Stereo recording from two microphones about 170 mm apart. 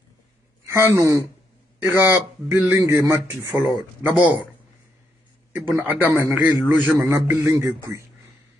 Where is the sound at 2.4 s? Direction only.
15° right (ahead or behind).